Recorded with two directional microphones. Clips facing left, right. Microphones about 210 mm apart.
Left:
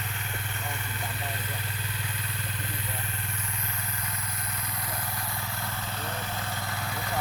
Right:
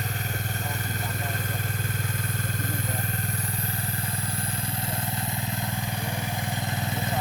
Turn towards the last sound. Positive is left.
turn(degrees=-20)  # may be behind; listen again after turning